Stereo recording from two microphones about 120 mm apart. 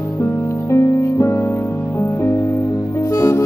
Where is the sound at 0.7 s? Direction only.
25° left (ahead or behind).